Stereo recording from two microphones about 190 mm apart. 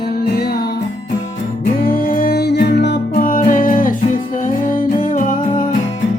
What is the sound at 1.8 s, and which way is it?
Music, 50° left (ahead or behind).